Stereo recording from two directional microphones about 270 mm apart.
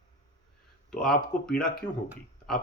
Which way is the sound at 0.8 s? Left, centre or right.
Centre.